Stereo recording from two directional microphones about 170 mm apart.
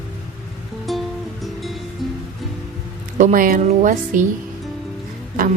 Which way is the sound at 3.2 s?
50° right (ahead or behind).